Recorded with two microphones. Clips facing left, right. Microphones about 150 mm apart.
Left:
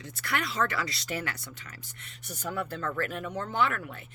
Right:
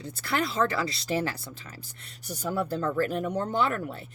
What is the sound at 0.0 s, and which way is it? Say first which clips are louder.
Speech: right 4 dB; 30° right (ahead or behind).